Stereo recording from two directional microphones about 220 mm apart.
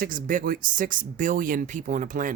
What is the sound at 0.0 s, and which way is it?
Speech, 40° right (ahead or behind).